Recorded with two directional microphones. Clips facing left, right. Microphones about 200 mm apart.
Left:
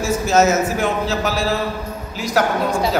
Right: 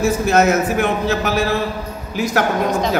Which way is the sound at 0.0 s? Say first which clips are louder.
Right 1 dB; 60° right (ahead or behind).